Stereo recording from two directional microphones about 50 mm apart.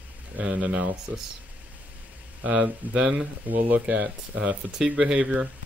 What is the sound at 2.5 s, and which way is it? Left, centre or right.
Speech, centre.